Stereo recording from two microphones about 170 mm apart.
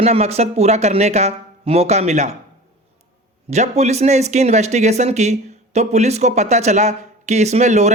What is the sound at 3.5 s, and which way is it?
Speech, 40° right (ahead or behind).